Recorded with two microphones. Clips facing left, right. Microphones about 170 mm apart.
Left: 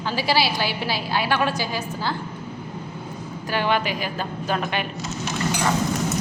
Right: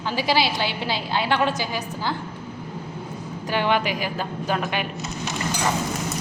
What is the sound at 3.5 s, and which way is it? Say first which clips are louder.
A woman's voice: right 1 dB; 15° right (ahead or behind).